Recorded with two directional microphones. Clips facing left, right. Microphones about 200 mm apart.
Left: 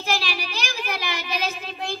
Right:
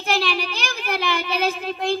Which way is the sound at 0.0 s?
60° right (ahead or behind).